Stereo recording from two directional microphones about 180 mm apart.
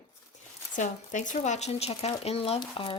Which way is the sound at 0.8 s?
45° left (ahead or behind).